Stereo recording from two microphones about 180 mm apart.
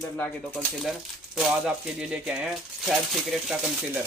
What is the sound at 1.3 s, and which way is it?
Speech, 5° right (ahead or behind).